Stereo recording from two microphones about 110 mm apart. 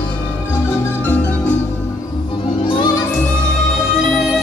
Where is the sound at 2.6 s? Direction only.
45° left (ahead or behind).